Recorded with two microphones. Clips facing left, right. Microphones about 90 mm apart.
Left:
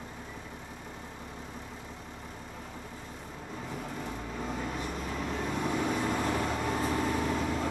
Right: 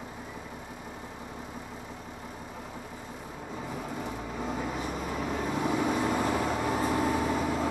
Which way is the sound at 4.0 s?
5° right (ahead or behind).